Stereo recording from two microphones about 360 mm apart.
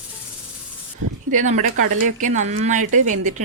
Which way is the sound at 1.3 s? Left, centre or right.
Centre.